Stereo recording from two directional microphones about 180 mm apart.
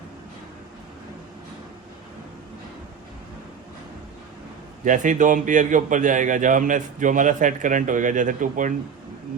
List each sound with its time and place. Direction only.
4.9 s a man's voice: 45° right (ahead or behind)